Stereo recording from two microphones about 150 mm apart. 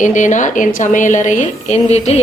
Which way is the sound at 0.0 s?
55° left (ahead or behind).